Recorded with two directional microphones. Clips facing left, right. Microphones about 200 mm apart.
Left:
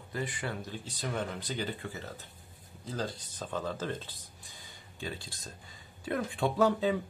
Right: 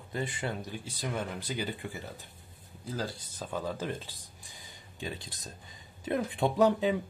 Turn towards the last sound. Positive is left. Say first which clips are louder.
# right 2 dB
turn(degrees=-15)  # may be behind; listen again after turning